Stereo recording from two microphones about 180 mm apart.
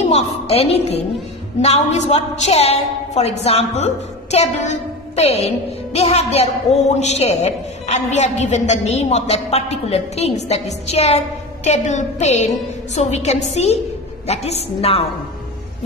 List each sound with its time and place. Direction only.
0.1 s a man's voice: 35° left (ahead or behind)